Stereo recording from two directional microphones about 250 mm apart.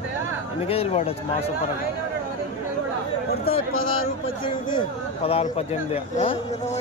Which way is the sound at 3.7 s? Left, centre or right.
Left.